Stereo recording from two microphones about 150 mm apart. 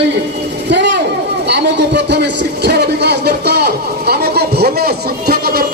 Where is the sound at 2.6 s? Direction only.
90° right.